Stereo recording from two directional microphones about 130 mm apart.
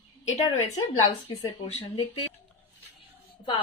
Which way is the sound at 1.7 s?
40° left (ahead or behind).